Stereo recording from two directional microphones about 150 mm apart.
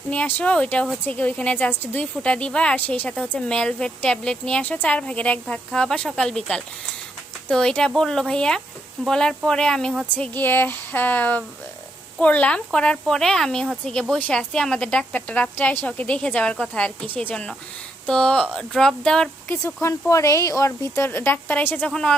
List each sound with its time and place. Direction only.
0.1 s a woman's voice: 10° left (ahead or behind)
19.5 s a woman's voice: 20° left (ahead or behind)